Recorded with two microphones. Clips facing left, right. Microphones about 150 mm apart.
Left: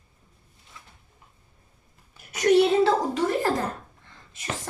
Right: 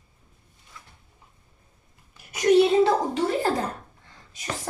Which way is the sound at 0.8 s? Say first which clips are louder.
Right 1 dB; 25° left (ahead or behind).